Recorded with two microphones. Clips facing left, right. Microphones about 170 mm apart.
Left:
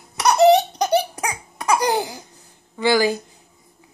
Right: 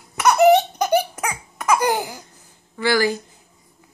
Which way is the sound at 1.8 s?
35° left (ahead or behind).